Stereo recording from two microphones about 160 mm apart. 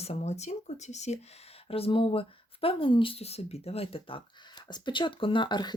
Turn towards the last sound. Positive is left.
turn(degrees=25)  # may be behind; listen again after turning